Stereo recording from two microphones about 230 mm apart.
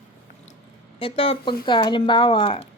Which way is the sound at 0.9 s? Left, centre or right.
Left.